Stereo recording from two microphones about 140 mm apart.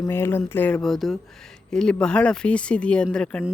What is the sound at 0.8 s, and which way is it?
Speech, centre (ahead or behind).